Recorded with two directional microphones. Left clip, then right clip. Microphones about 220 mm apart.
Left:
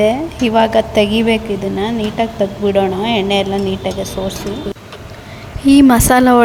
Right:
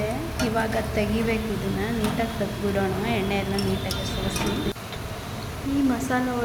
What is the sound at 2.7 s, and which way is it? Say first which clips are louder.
Speech: left 10 dB; 30° left (ahead or behind).